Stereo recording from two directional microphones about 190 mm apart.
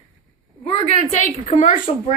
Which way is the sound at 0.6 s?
35° left (ahead or behind).